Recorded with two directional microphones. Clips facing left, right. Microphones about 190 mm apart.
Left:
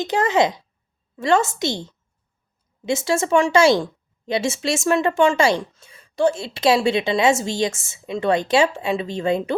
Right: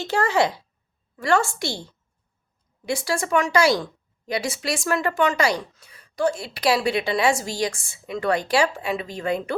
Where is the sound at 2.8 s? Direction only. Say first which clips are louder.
Left 4 dB; 25° left (ahead or behind).